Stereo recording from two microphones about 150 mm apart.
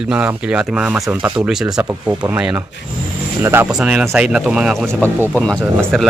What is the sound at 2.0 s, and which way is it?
Speech, 10° right (ahead or behind).